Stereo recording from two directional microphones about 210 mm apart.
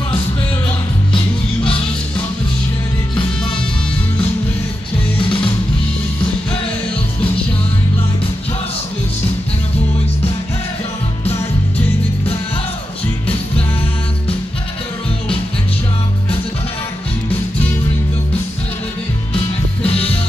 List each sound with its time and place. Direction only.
5.2 s music: 25° left (ahead or behind)
13.0 s music: 5° left (ahead or behind)
19.9 s music: 30° left (ahead or behind)